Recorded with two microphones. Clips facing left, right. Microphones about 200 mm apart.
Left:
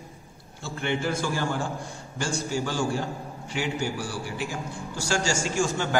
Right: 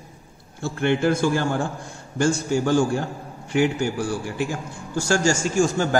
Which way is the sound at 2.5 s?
50° right (ahead or behind).